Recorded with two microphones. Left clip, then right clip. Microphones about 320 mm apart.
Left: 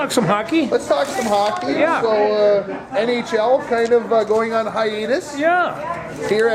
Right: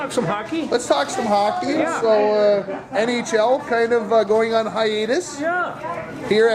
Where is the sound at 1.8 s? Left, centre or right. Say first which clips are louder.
Left 5 dB; left.